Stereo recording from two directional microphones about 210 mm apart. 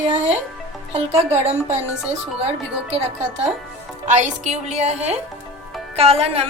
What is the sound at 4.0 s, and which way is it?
Music, 35° right (ahead or behind).